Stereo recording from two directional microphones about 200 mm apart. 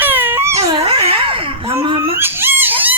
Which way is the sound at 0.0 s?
10° right (ahead or behind).